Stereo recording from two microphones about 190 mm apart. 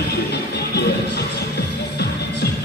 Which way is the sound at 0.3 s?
60° left (ahead or behind).